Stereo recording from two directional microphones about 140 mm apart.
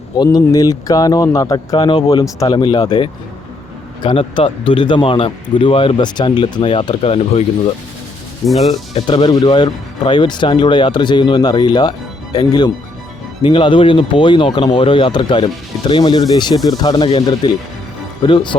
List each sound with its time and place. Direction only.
0.2 s a man's voice: 25° left (ahead or behind); by 7.4 s 45° left (ahead or behind)
8.4 s speech: centre (ahead or behind)
9.0 s a man's voice: 40° left (ahead or behind)